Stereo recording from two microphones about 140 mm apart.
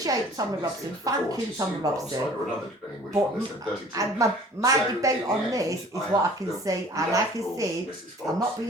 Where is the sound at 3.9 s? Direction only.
25° right (ahead or behind).